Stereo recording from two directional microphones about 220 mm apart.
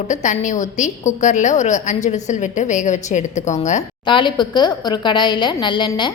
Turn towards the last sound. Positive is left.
turn(degrees=20)  # may be behind; listen again after turning